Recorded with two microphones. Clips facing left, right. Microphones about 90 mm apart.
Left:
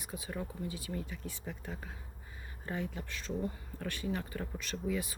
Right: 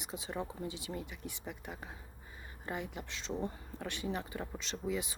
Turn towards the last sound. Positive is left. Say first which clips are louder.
# left 1 dB
turn(degrees=-20)  # may be behind; listen again after turning